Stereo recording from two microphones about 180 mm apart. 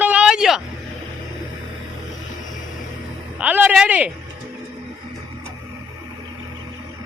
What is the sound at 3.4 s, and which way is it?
Speech, 10° right (ahead or behind).